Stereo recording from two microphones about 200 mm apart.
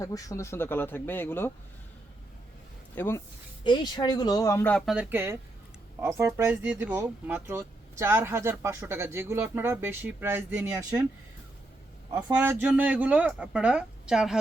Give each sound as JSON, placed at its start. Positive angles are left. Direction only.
{"t": 0.0, "sound": "speech", "side_deg": 15}
{"t": 2.9, "sound": "speech", "side_deg": 10}
{"t": 3.6, "sound": "speech", "side_deg": 25}
{"t": 4.9, "sound": "speech", "side_deg": -10}
{"t": 12.1, "sound": "speech", "side_deg": -10}